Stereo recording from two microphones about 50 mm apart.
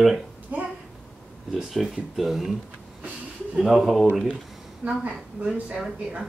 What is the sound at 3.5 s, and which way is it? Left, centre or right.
Speech, centre.